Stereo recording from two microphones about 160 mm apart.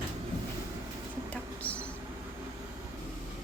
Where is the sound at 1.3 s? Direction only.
10° left (ahead or behind).